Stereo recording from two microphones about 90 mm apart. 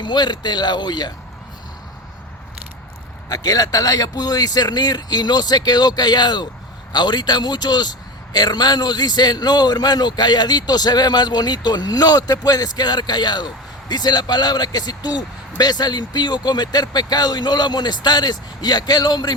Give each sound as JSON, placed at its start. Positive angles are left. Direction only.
{"t": 0.0, "sound": "a man's voice", "side_deg": 55}
{"t": 3.2, "sound": "a man's voice", "side_deg": 45}